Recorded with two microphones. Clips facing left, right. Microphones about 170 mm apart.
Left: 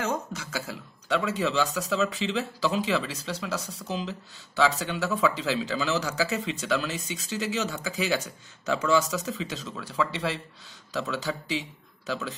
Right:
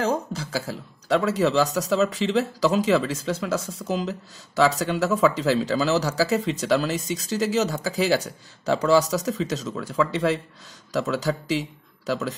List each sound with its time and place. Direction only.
0.0 s speech: 35° right (ahead or behind)